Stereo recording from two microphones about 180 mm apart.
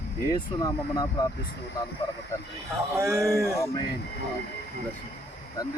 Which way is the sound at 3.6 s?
20° left (ahead or behind).